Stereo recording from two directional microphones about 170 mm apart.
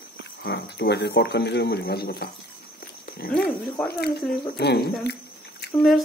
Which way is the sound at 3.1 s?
60° left (ahead or behind).